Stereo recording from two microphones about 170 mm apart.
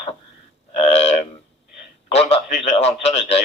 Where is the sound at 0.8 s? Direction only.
40° left (ahead or behind).